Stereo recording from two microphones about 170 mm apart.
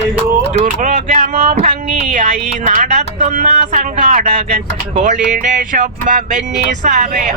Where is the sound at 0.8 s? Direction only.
40° right (ahead or behind).